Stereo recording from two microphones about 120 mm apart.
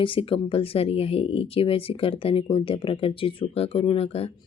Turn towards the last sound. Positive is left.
turn(degrees=55)  # may be behind; listen again after turning